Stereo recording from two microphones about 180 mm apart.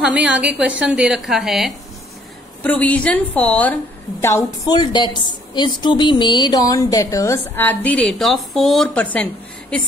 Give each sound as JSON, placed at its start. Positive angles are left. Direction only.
{"t": 0.0, "sound": "a woman's voice", "side_deg": -5}